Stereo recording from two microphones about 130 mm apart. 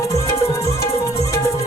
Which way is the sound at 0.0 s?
25° left (ahead or behind).